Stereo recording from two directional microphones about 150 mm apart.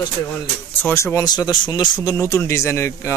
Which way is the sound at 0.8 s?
20° left (ahead or behind).